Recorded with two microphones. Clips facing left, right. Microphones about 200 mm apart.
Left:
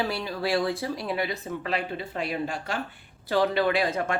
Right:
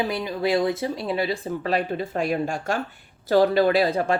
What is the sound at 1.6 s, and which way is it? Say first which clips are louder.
Speech: right 7 dB; 40° right (ahead or behind).